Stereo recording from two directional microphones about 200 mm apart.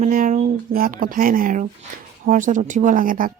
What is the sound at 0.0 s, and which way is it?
Speech, 40° right (ahead or behind).